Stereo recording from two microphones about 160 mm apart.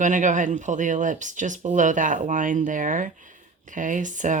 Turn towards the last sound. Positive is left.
turn(degrees=-50)  # may be behind; listen again after turning